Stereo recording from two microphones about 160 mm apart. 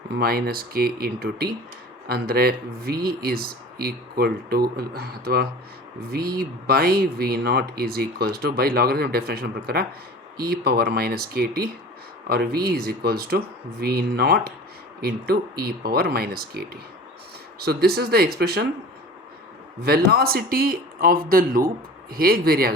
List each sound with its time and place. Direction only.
0.1 s speech: 75° right (ahead or behind)
19.8 s speech: 75° right (ahead or behind)